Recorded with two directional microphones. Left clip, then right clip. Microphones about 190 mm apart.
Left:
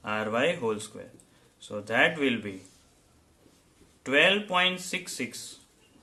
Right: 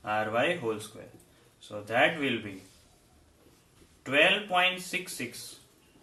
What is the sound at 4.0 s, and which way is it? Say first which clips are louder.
Speech: left 1 dB; 55° left (ahead or behind).